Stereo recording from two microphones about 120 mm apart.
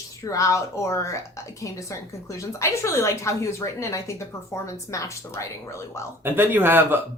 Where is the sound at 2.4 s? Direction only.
25° left (ahead or behind).